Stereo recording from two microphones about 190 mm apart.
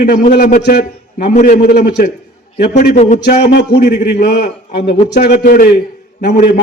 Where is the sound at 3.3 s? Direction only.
60° left (ahead or behind).